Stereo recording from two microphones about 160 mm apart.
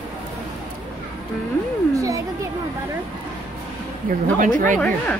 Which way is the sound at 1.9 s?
20° right (ahead or behind).